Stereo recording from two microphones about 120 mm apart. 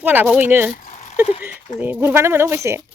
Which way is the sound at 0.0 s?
15° right (ahead or behind).